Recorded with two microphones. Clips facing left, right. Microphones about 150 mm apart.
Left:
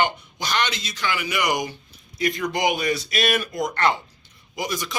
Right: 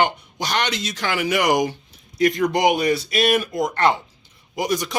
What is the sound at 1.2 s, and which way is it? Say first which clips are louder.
Speech: right 8 dB; 45° right (ahead or behind).